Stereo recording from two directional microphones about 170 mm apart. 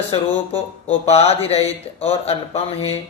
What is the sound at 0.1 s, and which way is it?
Speech, 35° left (ahead or behind).